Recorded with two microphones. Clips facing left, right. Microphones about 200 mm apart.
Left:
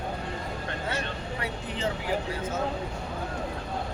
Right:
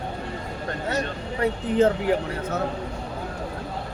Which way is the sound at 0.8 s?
45° right (ahead or behind).